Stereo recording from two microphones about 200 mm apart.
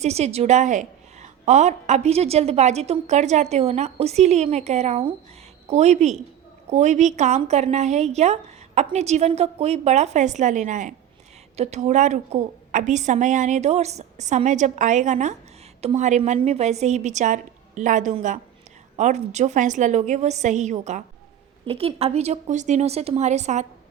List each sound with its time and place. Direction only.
0.0 s a woman's voice: 30° right (ahead or behind)